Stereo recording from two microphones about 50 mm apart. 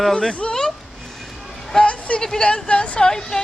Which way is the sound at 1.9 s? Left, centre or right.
Left.